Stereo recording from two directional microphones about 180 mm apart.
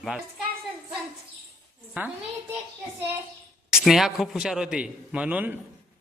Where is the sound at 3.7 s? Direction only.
Centre (ahead or behind).